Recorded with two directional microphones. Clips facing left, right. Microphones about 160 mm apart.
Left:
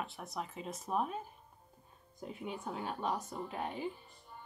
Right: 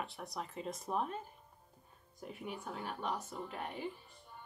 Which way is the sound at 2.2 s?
20° left (ahead or behind).